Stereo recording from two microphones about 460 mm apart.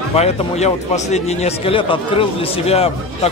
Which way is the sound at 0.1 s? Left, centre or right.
Centre.